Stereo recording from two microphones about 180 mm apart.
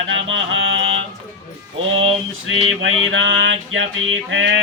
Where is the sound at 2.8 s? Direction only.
90° right.